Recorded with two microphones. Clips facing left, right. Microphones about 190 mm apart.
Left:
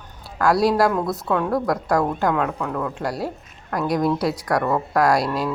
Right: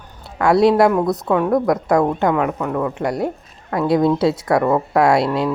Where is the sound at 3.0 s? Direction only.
20° right (ahead or behind).